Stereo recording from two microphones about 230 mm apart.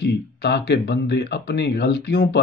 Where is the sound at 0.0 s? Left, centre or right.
Left.